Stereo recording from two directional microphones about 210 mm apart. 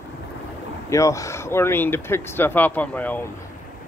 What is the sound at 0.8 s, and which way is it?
Speech, 15° left (ahead or behind).